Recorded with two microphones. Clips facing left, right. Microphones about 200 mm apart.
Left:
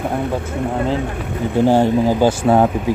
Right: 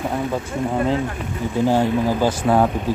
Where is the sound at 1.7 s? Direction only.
30° left (ahead or behind).